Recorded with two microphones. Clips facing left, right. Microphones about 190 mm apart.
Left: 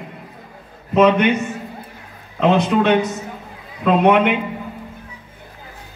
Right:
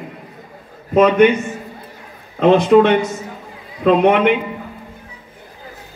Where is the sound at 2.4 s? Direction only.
50° right (ahead or behind).